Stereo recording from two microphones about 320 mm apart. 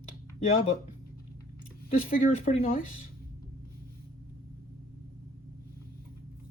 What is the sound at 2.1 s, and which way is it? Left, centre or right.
Speech, left.